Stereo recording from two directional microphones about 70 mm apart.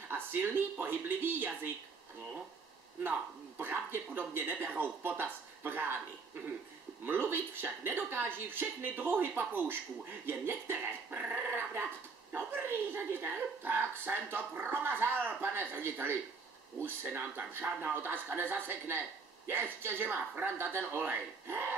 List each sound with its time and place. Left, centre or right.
0.1 s speech: right
3.0 s a man's voice: right; by 17.9 s centre
17.9 s a man's voice: right